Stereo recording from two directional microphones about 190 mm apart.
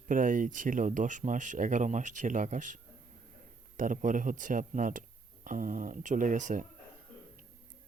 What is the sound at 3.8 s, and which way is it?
Speech, 45° right (ahead or behind).